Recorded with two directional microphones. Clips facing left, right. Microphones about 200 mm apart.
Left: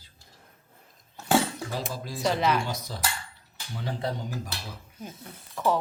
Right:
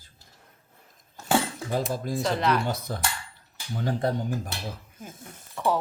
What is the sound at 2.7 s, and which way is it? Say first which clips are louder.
Speech: right 3 dB; 55° right (ahead or behind).